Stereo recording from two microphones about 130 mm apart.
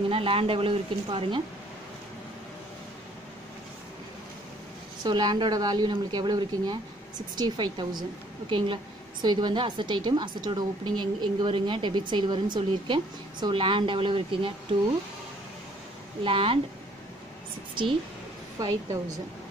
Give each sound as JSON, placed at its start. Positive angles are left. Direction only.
{"t": 0.1, "sound": "speech", "side_deg": -45}
{"t": 5.0, "sound": "a woman's voice", "side_deg": -35}
{"t": 16.3, "sound": "speech", "side_deg": -45}
{"t": 18.6, "sound": "a woman's voice", "side_deg": -25}